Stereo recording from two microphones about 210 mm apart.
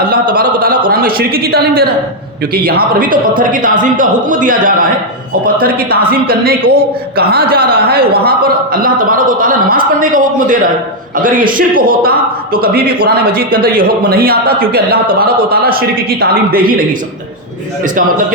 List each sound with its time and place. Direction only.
0.0 s a sound: 45° right (ahead or behind)
0.9 s a man's voice: 45° right (ahead or behind)
6.2 s a man's voice: 45° right (ahead or behind)